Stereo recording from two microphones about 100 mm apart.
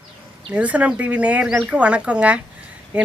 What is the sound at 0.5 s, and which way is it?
Speech, 15° right (ahead or behind).